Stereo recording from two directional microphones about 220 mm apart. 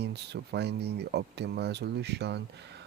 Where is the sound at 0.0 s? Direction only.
50° right (ahead or behind).